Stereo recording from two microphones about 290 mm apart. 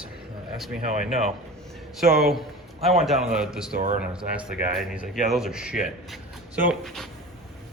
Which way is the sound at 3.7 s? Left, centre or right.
Right.